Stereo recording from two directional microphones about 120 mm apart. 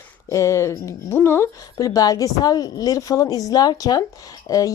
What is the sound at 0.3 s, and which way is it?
Speech, 25° left (ahead or behind).